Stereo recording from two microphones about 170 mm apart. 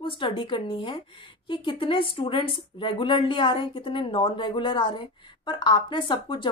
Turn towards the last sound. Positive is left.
turn(degrees=30)  # may be behind; listen again after turning